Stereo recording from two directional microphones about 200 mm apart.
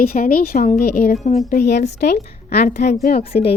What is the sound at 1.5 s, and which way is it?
A woman's voice, 55° left (ahead or behind).